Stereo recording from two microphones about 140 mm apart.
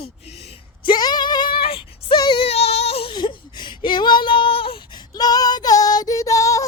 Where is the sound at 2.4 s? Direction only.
50° left (ahead or behind).